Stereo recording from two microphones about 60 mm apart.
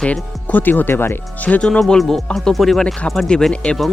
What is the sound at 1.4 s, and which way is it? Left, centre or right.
Speech, left.